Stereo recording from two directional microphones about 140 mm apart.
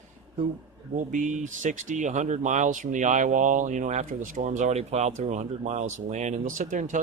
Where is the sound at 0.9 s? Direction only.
65° right (ahead or behind).